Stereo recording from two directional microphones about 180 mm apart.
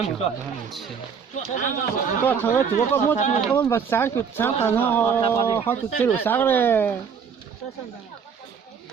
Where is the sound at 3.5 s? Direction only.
15° left (ahead or behind).